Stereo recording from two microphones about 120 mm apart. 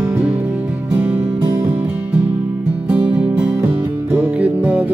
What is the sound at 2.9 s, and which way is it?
Music, 10° right (ahead or behind).